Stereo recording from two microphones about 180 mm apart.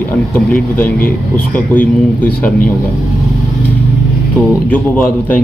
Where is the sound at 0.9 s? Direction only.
55° left (ahead or behind).